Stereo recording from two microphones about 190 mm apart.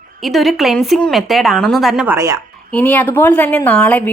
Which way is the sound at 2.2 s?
20° right (ahead or behind).